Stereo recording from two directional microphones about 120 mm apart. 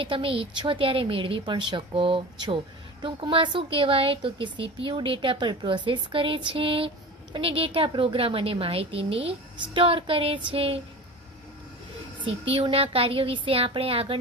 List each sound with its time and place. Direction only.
0.0 s a woman's voice: 50° right (ahead or behind)
12.2 s a woman's voice: 45° right (ahead or behind)